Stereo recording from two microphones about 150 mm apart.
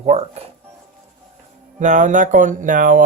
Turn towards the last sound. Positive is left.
turn(degrees=-60)  # may be behind; listen again after turning